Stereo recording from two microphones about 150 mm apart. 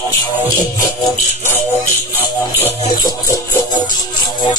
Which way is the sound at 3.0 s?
25° left (ahead or behind).